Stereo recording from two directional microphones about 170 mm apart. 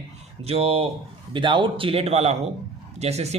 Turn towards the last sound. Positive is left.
turn(degrees=-40)  # may be behind; listen again after turning